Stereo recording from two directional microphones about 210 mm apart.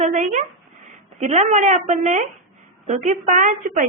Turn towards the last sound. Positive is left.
turn(degrees=-35)  # may be behind; listen again after turning